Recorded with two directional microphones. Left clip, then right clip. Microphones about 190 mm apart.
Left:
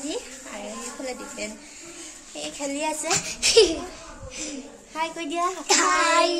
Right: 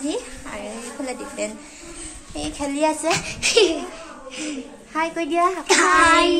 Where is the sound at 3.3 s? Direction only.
15° left (ahead or behind).